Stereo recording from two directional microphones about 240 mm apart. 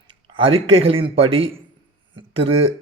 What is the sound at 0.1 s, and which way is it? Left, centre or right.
A man's voice, right.